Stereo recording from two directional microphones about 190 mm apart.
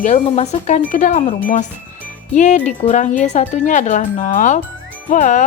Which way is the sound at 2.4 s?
40° left (ahead or behind).